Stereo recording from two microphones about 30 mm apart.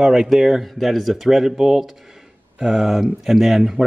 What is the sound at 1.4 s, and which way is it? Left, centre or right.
Speech, centre.